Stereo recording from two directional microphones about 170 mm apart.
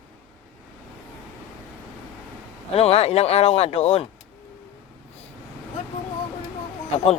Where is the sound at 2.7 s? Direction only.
35° left (ahead or behind).